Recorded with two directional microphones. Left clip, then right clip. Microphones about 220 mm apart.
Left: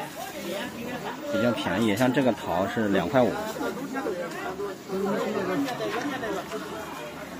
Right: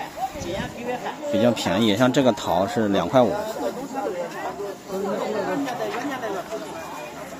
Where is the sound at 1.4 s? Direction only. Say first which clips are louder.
Right 5 dB; 20° right (ahead or behind).